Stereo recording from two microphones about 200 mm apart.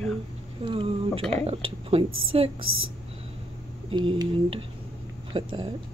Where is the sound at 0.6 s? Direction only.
25° right (ahead or behind).